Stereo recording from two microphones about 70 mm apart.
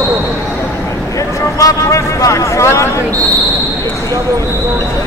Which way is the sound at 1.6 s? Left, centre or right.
Left.